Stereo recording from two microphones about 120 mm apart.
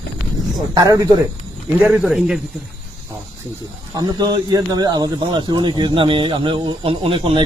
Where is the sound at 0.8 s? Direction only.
30° right (ahead or behind).